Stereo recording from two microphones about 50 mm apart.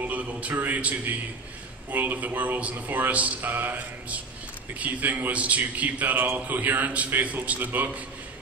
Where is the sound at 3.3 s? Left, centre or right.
Right.